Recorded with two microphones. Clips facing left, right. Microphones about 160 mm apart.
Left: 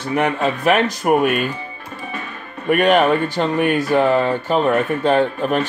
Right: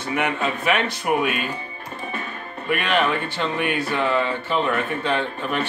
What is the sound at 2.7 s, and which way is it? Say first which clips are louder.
Speech: left 7 dB; 45° left (ahead or behind).